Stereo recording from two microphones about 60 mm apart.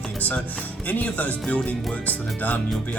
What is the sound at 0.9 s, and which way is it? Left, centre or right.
Speech, left.